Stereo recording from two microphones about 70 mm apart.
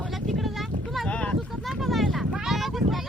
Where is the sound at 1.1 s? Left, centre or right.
Centre.